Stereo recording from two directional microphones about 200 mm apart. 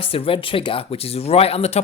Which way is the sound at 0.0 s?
25° left (ahead or behind).